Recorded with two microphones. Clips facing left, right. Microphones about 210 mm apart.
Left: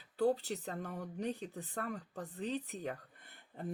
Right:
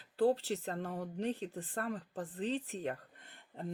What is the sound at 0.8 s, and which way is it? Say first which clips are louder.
Speech: right 3 dB; 30° right (ahead or behind).